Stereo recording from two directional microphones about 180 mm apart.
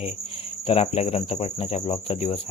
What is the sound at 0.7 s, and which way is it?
Speech, 35° left (ahead or behind).